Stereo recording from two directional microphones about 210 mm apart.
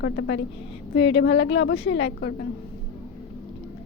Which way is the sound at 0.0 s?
55° left (ahead or behind).